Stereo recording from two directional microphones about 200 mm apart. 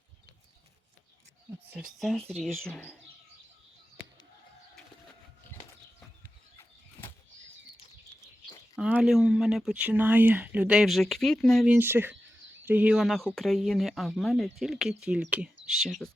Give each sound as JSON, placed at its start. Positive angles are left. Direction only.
{"t": 1.6, "sound": "speech", "side_deg": -5}
{"t": 8.7, "sound": "speech", "side_deg": -5}